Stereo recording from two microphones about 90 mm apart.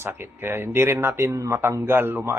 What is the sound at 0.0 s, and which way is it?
Speech, 25° right (ahead or behind).